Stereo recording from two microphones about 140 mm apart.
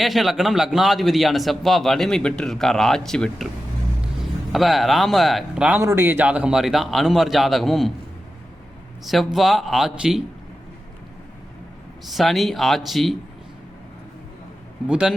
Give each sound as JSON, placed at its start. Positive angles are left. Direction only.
{"t": 0.0, "sound": "a man's voice", "side_deg": 0}
{"t": 4.5, "sound": "a man's voice", "side_deg": 0}
{"t": 5.8, "sound": "a man's voice", "side_deg": -20}
{"t": 9.0, "sound": "a man's voice", "side_deg": 0}
{"t": 12.0, "sound": "a man's voice", "side_deg": 0}
{"t": 14.8, "sound": "speech", "side_deg": -5}